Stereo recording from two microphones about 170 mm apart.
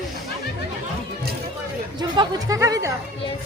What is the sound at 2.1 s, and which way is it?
Speech, 20° right (ahead or behind).